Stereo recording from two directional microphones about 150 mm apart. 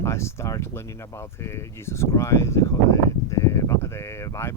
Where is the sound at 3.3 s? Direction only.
20° left (ahead or behind).